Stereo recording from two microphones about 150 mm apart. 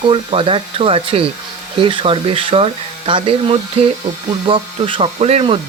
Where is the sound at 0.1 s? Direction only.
35° right (ahead or behind).